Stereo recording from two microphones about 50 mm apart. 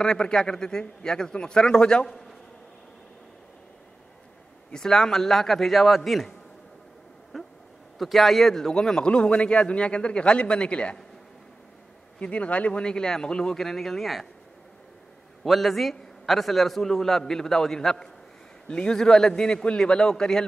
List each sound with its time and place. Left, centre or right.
0.0 s a man's voice: centre
4.7 s a man's voice: centre
7.3 s a sound: centre
8.0 s a man's voice: centre; by 11.0 s left
12.2 s a man's voice: left; by 14.2 s centre
15.4 s a man's voice: centre